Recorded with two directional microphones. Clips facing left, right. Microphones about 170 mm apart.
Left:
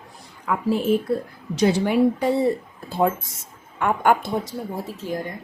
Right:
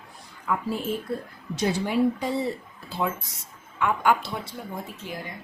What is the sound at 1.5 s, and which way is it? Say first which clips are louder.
Speech: left 6 dB; 70° left (ahead or behind).